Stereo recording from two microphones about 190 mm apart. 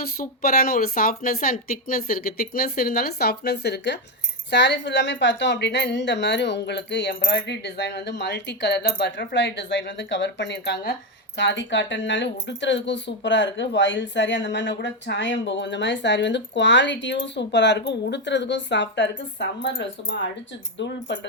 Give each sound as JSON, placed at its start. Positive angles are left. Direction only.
{"t": 0.0, "sound": "speech", "side_deg": 50}